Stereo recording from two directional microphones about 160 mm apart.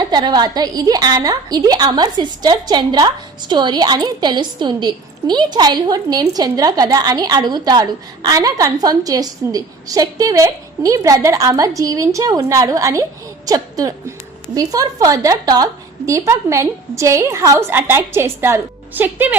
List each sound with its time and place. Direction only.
0.0 s a woman's voice: 25° right (ahead or behind)